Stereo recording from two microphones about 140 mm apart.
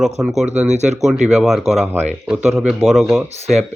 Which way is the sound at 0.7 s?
55° right (ahead or behind).